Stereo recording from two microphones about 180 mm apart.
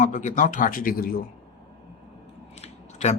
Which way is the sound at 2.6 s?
40° left (ahead or behind).